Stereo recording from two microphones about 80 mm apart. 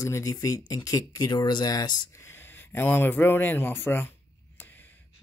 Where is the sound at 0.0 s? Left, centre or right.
Left.